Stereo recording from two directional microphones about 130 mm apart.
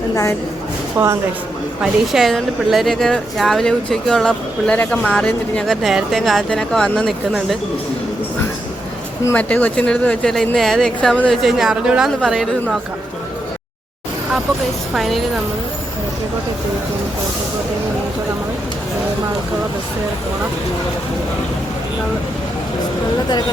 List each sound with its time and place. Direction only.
0.9 s speech: 20° right (ahead or behind)
1.8 s speech: centre (ahead or behind)
9.3 s speech: 10° left (ahead or behind)
14.9 s speech: centre (ahead or behind)